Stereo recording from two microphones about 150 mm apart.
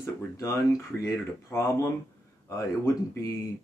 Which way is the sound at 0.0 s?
20° left (ahead or behind).